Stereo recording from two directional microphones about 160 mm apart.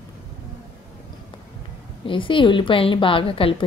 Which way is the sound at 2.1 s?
30° left (ahead or behind).